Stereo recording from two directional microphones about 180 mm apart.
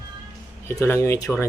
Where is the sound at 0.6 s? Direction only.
15° left (ahead or behind).